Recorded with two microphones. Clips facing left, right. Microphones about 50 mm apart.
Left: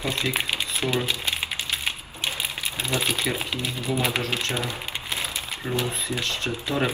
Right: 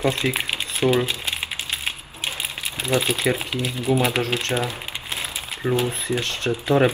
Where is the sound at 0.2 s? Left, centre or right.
Right.